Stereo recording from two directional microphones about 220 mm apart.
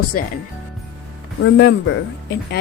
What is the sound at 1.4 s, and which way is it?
Speech, 50° left (ahead or behind).